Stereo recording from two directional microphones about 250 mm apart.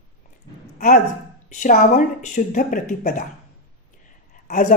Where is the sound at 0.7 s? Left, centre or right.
Left.